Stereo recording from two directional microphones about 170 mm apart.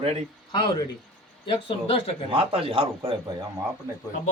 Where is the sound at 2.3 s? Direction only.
30° right (ahead or behind).